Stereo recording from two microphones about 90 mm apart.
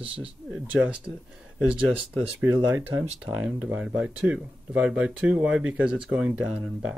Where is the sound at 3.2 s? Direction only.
10° right (ahead or behind).